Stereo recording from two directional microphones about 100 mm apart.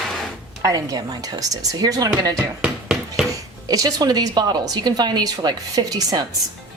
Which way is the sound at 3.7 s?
35° right (ahead or behind).